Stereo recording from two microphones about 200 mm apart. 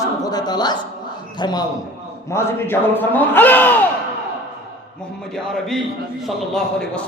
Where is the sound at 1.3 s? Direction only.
20° left (ahead or behind).